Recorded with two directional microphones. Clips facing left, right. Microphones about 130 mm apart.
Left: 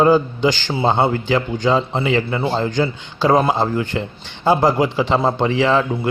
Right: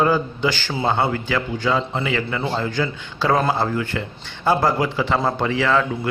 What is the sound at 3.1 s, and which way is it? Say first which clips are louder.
A man's voice: left 4 dB; 15° left (ahead or behind).